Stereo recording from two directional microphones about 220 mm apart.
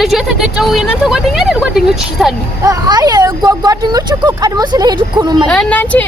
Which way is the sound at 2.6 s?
15° right (ahead or behind).